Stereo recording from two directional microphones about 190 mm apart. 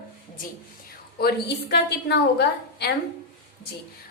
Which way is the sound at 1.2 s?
60° left (ahead or behind).